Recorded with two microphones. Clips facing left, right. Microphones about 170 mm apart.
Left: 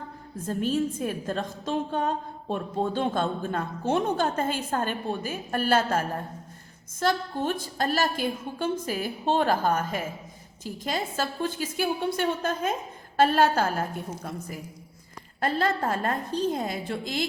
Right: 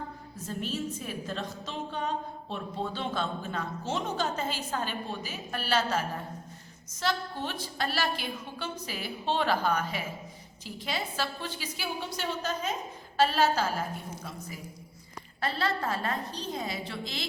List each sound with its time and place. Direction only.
0.3 s a woman's voice: 50° left (ahead or behind)
15.4 s a woman's voice: 50° left (ahead or behind)